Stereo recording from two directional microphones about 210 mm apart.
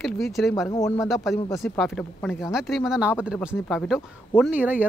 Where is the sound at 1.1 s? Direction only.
Centre (ahead or behind).